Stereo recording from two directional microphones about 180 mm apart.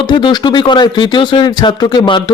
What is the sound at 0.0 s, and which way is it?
Speech, 25° left (ahead or behind).